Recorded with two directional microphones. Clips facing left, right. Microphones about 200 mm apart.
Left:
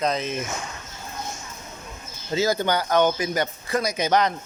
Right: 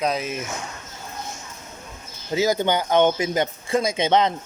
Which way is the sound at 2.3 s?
15° right (ahead or behind).